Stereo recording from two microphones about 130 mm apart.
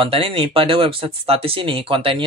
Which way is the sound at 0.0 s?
45° right (ahead or behind).